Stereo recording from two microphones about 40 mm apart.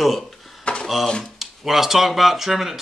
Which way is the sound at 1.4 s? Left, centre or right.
Centre.